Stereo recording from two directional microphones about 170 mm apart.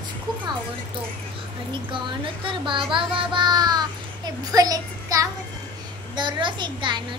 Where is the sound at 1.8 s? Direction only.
30° right (ahead or behind).